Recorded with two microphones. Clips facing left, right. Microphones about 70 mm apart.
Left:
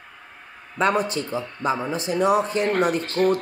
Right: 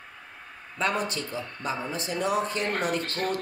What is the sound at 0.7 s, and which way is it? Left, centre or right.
A man's voice, left.